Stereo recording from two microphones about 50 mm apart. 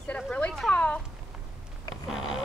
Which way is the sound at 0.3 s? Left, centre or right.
Left.